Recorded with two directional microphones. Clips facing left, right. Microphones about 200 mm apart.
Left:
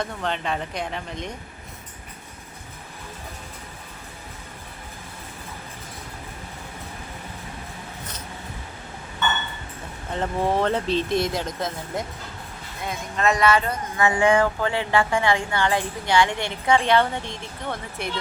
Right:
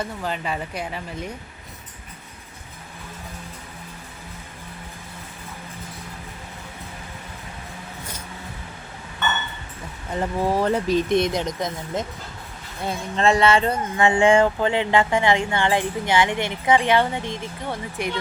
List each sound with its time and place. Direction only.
0.0 s speech: 5° right (ahead or behind)
10.1 s speech: 10° right (ahead or behind)
12.8 s speech: 30° right (ahead or behind)